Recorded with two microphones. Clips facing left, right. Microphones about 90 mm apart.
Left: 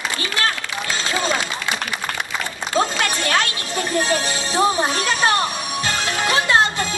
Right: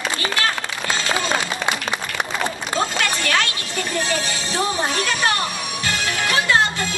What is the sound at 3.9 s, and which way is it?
Music, 20° left (ahead or behind).